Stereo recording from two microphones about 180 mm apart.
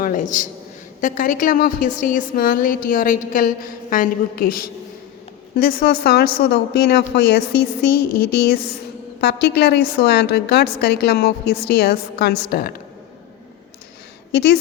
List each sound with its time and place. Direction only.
0.0 s a woman's voice: 45° left (ahead or behind)
14.3 s a woman's voice: 65° left (ahead or behind)